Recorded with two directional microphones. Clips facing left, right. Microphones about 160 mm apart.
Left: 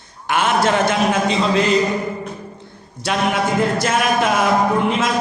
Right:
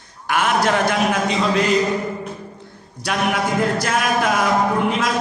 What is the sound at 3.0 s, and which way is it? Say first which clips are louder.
Music: left 2 dB; 25° left (ahead or behind).